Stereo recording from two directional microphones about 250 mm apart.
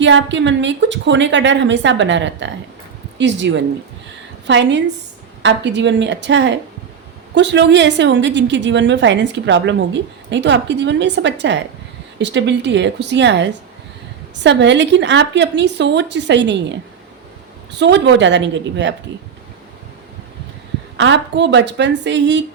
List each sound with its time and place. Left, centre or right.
0.0 s a woman's voice: right
17.7 s a woman's voice: right
20.9 s a woman's voice: right